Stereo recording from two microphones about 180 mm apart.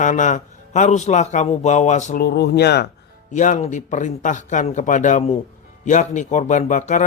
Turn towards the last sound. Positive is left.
turn(degrees=45)  # may be behind; listen again after turning